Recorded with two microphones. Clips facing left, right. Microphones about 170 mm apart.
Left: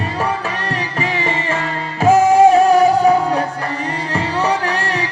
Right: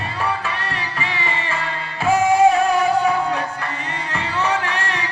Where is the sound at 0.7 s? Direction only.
45° left (ahead or behind).